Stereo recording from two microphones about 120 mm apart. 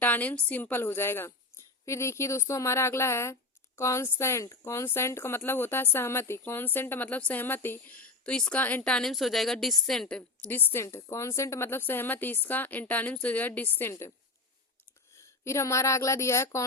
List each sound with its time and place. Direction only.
0.0 s speech: 15° left (ahead or behind)
15.1 s speech: 25° left (ahead or behind)